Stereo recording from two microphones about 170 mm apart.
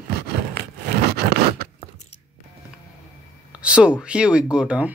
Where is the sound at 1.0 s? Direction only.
65° right (ahead or behind).